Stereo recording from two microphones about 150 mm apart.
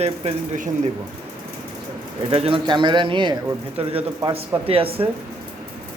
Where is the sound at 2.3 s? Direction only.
40° right (ahead or behind).